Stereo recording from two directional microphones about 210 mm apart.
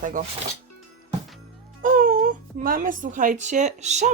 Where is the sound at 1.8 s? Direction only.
40° right (ahead or behind).